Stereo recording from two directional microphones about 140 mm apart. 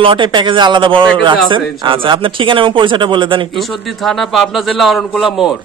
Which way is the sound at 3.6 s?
Centre (ahead or behind).